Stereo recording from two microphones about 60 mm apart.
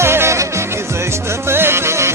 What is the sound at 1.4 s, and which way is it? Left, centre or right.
Music, right.